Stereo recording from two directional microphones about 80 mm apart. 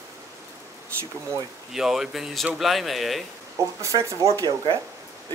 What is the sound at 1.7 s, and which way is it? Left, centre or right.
Speech, centre.